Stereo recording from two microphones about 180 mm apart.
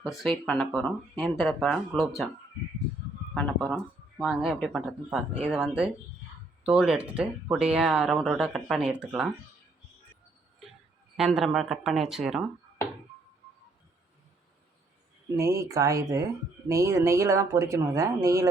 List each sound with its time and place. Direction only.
0.2 s speech: 5° left (ahead or behind)
3.3 s speech: 5° left (ahead or behind)
11.2 s speech: centre (ahead or behind)
15.4 s speech: 15° right (ahead or behind)